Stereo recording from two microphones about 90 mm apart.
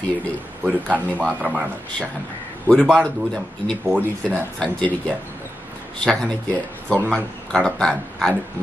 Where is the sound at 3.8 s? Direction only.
20° right (ahead or behind).